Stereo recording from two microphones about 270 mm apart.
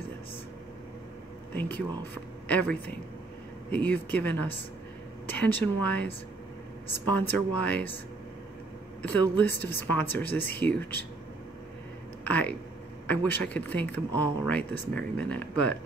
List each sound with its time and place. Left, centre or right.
1.5 s a woman's voice: centre
7.2 s speech: centre
9.4 s speech: centre
12.3 s speech: centre